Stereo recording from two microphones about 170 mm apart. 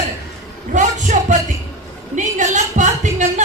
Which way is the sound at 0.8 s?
45° right (ahead or behind).